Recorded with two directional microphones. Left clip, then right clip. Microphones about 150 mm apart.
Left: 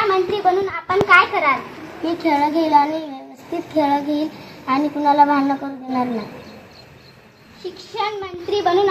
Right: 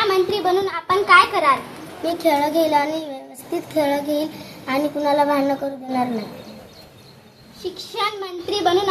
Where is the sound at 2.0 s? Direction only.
20° right (ahead or behind).